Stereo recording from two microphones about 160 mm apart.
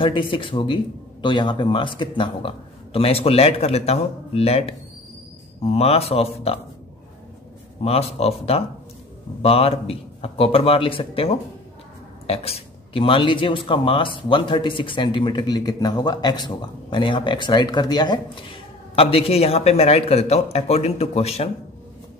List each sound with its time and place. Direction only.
0.0 s a man's voice: 30° left (ahead or behind)
7.8 s a man's voice: 40° left (ahead or behind)